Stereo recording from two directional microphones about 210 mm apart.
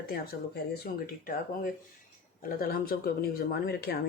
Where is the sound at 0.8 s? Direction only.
40° left (ahead or behind).